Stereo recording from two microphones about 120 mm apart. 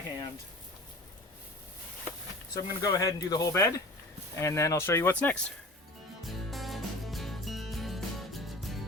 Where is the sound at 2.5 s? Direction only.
30° left (ahead or behind).